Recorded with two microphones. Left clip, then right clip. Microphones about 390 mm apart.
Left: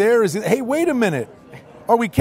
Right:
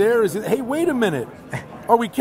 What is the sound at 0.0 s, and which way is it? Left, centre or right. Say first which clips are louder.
Speech: left 2 dB; left.